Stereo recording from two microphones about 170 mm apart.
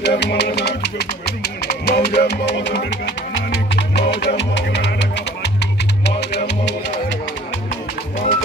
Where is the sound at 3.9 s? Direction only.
85° left.